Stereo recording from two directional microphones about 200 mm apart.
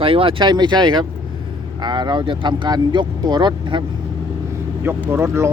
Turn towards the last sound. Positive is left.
turn(degrees=-15)  # may be behind; listen again after turning